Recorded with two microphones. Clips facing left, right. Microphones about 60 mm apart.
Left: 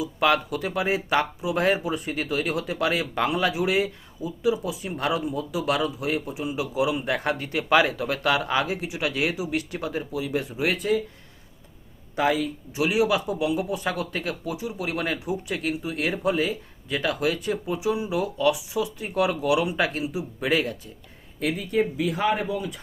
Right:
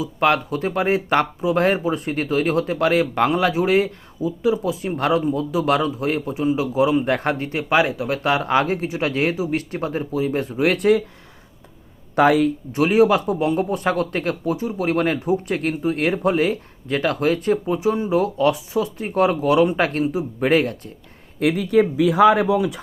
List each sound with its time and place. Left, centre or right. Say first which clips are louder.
0.0 s a man's voice: right 3 dB; right
8.4 s a man's voice: right 6 dB; right
10.6 s speech: right 8 dB; right
12.1 s speech: right 8 dB; right
21.3 s speech: right 7 dB; right